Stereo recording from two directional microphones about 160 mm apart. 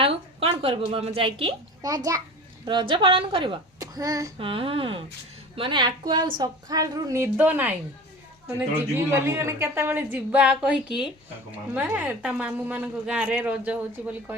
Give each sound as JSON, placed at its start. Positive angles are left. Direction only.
{"t": 0.0, "sound": "a woman's voice", "side_deg": -35}
{"t": 1.8, "sound": "a woman's voice", "side_deg": -20}
{"t": 4.4, "sound": "a woman's voice", "side_deg": -35}
{"t": 9.0, "sound": "speech", "side_deg": -15}